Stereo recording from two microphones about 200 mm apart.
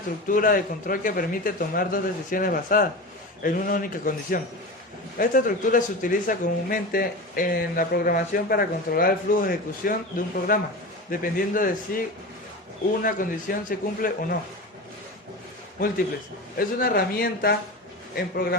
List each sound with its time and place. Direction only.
0.3 s speech: 45° left (ahead or behind)
16.6 s speech: 45° left (ahead or behind)